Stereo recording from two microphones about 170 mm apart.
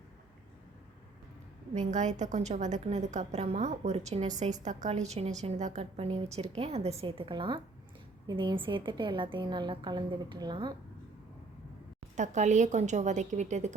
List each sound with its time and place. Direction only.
1.7 s a woman's voice: 45° right (ahead or behind); by 10.8 s 25° right (ahead or behind)
12.1 s a woman's voice: 45° right (ahead or behind)